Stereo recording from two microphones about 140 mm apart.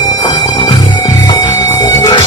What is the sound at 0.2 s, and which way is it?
Music, 30° left (ahead or behind).